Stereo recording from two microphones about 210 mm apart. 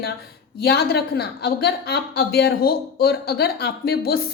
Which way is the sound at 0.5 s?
50° left (ahead or behind).